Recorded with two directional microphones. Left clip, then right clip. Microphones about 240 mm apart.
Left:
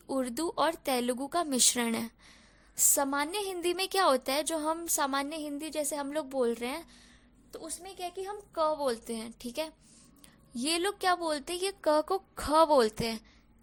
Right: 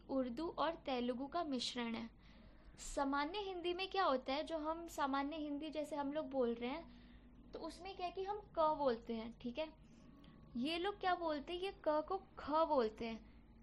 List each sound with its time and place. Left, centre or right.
0.1 s a woman's voice: left